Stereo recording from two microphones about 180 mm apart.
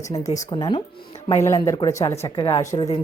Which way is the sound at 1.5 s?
15° left (ahead or behind).